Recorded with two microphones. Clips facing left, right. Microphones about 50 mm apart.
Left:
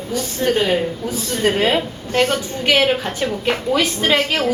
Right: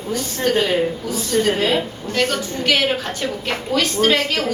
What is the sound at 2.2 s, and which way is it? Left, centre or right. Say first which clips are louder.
A woman's voice: left 1 dB; centre.